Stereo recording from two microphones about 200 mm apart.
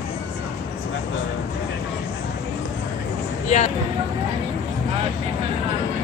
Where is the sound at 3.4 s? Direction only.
35° left (ahead or behind).